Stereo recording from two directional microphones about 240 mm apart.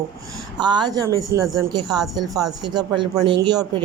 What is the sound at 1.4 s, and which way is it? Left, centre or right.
Speech, centre.